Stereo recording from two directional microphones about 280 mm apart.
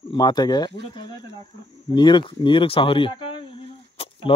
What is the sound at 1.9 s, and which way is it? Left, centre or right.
Speech, centre.